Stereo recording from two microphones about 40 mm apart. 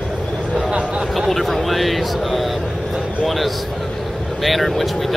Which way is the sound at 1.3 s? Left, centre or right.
Centre.